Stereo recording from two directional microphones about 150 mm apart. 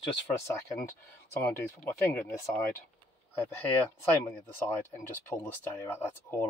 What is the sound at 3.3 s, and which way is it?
Speech, 10° left (ahead or behind).